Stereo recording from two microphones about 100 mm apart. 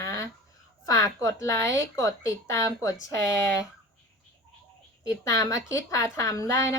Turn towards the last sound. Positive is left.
turn(degrees=35)  # may be behind; listen again after turning